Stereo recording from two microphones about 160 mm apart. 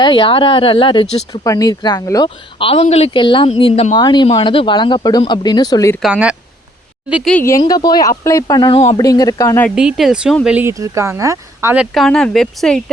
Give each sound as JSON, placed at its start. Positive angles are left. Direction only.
{"t": 0.0, "sound": "speech", "side_deg": 30}
{"t": 1.3, "sound": "speech", "side_deg": 20}
{"t": 6.0, "sound": "speech", "side_deg": -5}
{"t": 7.4, "sound": "speech", "side_deg": 20}
{"t": 9.6, "sound": "speech", "side_deg": 0}
{"t": 11.8, "sound": "speech", "side_deg": 0}